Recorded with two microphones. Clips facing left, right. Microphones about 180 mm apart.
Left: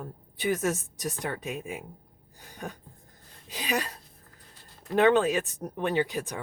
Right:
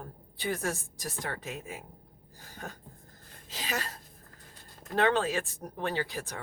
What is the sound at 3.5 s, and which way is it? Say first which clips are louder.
Speech: left 5 dB; 15° left (ahead or behind).